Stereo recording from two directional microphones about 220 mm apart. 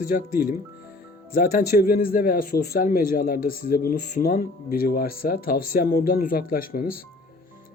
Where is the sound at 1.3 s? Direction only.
40° left (ahead or behind).